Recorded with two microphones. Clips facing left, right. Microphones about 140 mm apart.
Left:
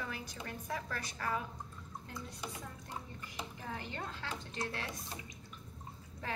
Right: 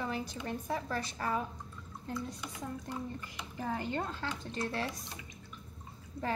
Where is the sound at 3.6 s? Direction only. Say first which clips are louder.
Right 11 dB; 45° right (ahead or behind).